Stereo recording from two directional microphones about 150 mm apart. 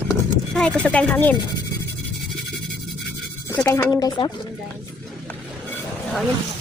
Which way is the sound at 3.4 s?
15° left (ahead or behind).